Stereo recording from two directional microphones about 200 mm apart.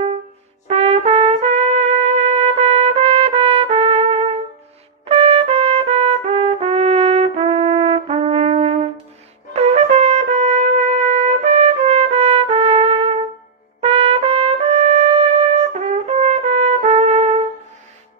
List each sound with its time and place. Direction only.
0.7 s trumpet: 30° right (ahead or behind)
9.5 s brass instrument: 30° right (ahead or behind)
11.2 s trumpet: 35° right (ahead or behind)